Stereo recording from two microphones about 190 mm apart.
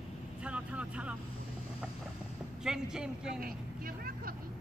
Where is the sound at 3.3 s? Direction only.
50° right (ahead or behind).